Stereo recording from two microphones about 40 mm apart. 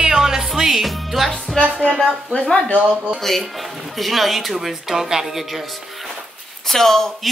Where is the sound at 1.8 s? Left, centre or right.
Centre.